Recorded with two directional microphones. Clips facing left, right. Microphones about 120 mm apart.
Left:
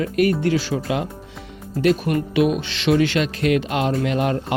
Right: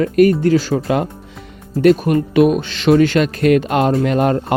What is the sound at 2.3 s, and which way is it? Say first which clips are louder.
Speech: right 6 dB; 45° right (ahead or behind).